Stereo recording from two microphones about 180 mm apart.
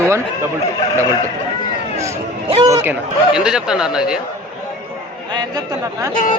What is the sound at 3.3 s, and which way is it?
Speech, 5° right (ahead or behind).